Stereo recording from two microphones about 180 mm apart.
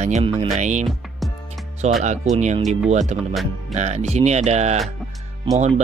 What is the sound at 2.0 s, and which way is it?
Speech, 40° right (ahead or behind).